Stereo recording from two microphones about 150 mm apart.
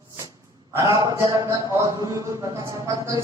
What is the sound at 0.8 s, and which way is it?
Speech, 20° right (ahead or behind).